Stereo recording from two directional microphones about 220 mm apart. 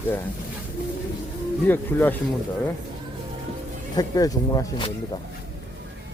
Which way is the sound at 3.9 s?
15° left (ahead or behind).